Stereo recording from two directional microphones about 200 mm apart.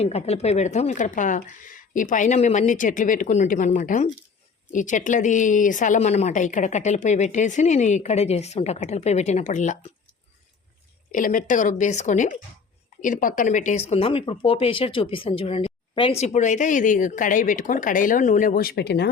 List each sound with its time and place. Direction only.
0.0 s speech: 30° left (ahead or behind)
11.1 s speech: 40° left (ahead or behind)